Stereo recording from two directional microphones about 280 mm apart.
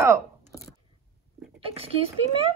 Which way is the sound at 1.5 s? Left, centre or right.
Right.